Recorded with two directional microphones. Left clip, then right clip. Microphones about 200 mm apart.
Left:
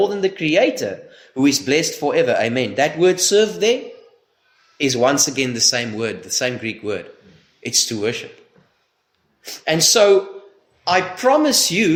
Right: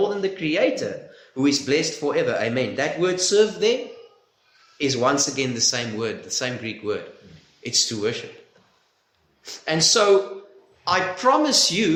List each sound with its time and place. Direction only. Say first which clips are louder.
0.0 s speech: left 5 dB; 50° left (ahead or behind)
4.8 s speech: left 4 dB; 50° left (ahead or behind)
9.4 s speech: left 4 dB; 50° left (ahead or behind)